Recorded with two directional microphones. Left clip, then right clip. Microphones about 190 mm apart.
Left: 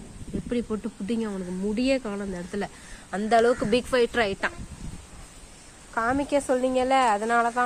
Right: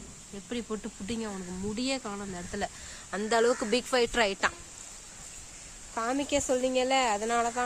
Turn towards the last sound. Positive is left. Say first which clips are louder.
# left 5 dB
turn(degrees=0)  # may be behind; listen again after turning